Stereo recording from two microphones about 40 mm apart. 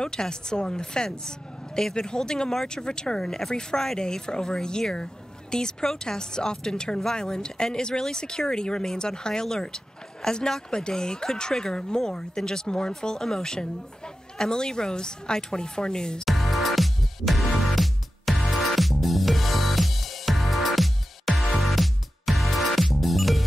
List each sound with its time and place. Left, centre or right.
0.0 s speech: centre
3.3 s speech: centre
16.3 s music: centre